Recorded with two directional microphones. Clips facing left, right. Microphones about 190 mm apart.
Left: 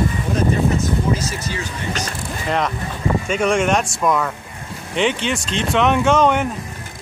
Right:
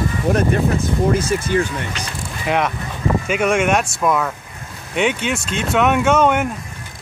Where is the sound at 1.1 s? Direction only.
55° right (ahead or behind).